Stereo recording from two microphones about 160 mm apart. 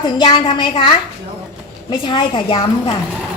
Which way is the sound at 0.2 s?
30° left (ahead or behind).